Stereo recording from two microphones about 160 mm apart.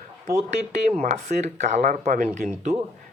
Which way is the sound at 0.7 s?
45° right (ahead or behind).